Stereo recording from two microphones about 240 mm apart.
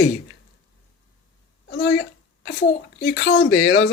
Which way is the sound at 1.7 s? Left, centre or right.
Left.